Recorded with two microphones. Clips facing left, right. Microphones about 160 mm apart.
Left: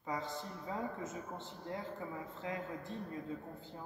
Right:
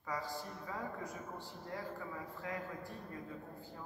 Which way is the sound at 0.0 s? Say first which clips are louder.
Left 1 dB; 20° left (ahead or behind).